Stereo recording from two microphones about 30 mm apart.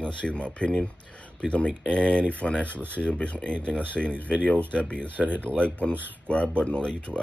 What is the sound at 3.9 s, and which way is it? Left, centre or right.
Speech, left.